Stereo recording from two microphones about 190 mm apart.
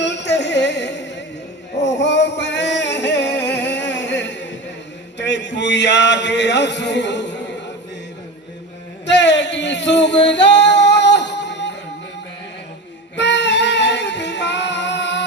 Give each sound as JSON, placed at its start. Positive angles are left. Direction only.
{"t": 0.0, "sound": "music", "side_deg": 65}
{"t": 5.1, "sound": "a sound", "side_deg": 70}
{"t": 9.0, "sound": "male singing", "side_deg": 65}
{"t": 13.1, "sound": "child singing", "side_deg": 65}